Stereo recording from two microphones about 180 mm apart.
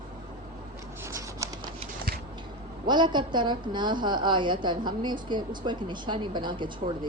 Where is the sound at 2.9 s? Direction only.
25° right (ahead or behind).